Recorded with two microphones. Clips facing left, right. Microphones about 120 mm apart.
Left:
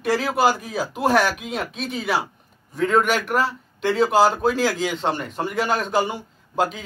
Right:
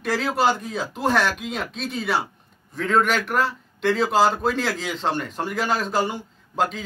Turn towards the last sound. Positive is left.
turn(degrees=0)  # may be behind; listen again after turning